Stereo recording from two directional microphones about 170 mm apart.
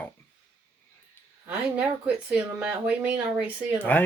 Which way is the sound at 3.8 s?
10° left (ahead or behind).